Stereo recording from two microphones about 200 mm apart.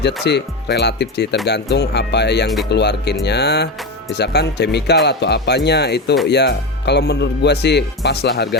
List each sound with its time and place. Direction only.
0.3 s speech: 55° left (ahead or behind)